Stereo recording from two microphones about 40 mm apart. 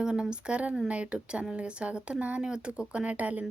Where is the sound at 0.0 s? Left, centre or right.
Right.